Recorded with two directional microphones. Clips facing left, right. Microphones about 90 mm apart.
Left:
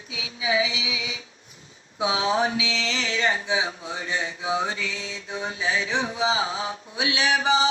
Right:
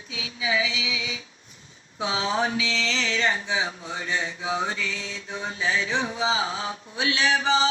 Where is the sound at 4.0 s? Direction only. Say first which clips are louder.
Even; 25° left (ahead or behind).